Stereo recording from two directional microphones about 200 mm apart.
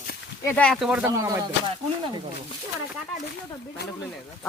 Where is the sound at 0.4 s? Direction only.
5° left (ahead or behind).